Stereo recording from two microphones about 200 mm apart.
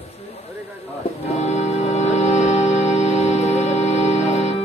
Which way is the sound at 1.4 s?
35° left (ahead or behind).